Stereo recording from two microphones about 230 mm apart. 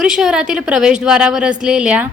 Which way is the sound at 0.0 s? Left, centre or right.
Centre.